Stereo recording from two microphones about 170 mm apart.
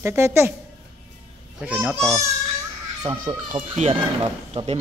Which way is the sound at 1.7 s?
10° right (ahead or behind).